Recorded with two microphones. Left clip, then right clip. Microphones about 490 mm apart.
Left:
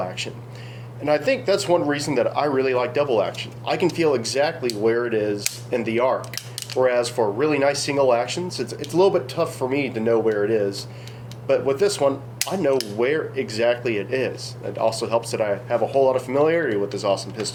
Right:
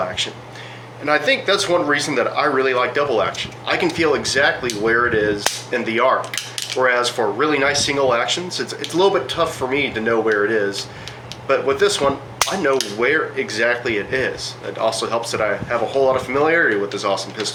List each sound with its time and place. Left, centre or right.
0.2 s speech: left